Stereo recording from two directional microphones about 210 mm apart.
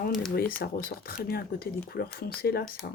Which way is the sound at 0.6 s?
45° left (ahead or behind).